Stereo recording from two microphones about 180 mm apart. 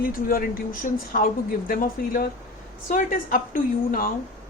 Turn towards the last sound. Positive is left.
turn(degrees=50)  # may be behind; listen again after turning